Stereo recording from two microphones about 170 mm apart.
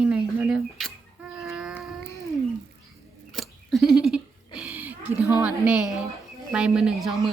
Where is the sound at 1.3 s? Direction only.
Centre (ahead or behind).